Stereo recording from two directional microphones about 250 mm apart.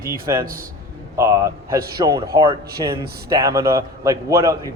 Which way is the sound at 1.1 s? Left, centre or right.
Centre.